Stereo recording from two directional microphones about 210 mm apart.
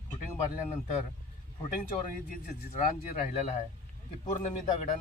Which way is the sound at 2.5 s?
40° left (ahead or behind).